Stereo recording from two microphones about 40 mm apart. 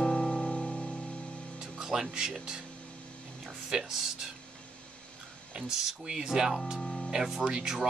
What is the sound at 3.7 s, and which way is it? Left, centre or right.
Speech, centre.